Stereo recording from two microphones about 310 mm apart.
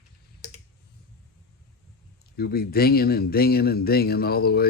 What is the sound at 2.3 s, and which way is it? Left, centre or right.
Speech, left.